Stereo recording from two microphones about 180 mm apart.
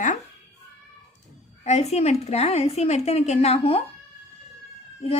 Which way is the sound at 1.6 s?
35° left (ahead or behind).